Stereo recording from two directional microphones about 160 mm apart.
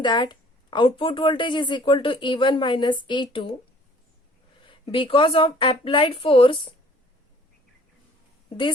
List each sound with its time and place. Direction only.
0.0 s a woman's voice: 30° left (ahead or behind)
4.6 s a woman's voice: 30° left (ahead or behind)